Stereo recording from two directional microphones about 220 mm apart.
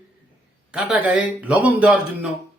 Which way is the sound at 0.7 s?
5° right (ahead or behind).